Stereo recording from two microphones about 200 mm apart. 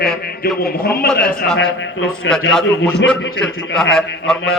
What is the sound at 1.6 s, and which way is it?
Speech, 70° left (ahead or behind).